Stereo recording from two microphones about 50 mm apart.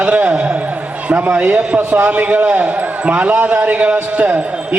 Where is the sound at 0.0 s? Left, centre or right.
Right.